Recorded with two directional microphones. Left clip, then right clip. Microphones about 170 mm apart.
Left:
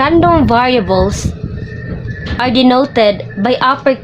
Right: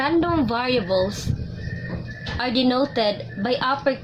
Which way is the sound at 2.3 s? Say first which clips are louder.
Left 11 dB; 45° left (ahead or behind).